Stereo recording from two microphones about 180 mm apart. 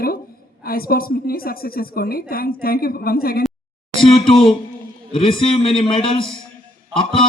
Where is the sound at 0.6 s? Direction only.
55° left (ahead or behind).